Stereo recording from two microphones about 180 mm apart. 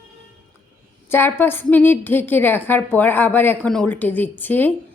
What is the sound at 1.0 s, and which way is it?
A woman's voice, 10° left (ahead or behind).